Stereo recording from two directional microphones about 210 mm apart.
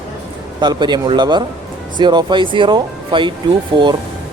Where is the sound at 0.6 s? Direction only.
20° right (ahead or behind).